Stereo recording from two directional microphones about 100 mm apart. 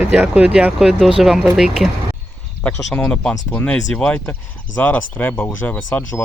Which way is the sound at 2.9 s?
10° left (ahead or behind).